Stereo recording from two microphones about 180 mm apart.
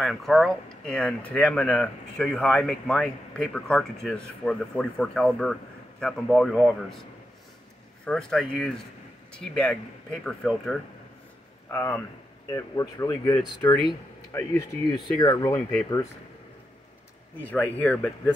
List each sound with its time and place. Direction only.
0.0 s speech: centre (ahead or behind)
11.7 s speech: 15° left (ahead or behind)
15.0 s speech: 20° left (ahead or behind)
17.4 s speech: 10° left (ahead or behind)